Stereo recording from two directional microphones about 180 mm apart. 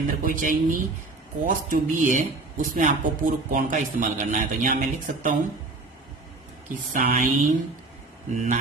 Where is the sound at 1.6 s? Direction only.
50° right (ahead or behind).